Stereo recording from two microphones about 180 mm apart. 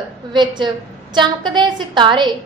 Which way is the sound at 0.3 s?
25° right (ahead or behind).